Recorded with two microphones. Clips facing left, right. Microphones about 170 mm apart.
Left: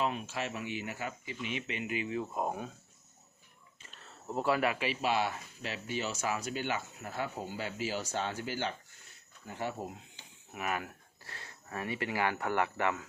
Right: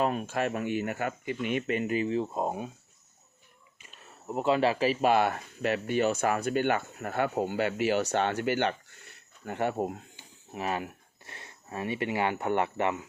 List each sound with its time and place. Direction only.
0.0 s speech: 50° right (ahead or behind); by 2.6 s 20° right (ahead or behind)
3.8 s speech: 15° right (ahead or behind); by 10.2 s 50° right (ahead or behind)
10.5 s speech: 30° right (ahead or behind)